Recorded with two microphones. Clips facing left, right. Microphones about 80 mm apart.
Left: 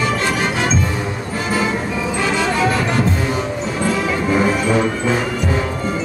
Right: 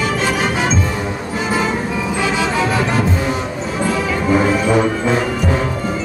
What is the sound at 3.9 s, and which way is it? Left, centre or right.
Music, centre.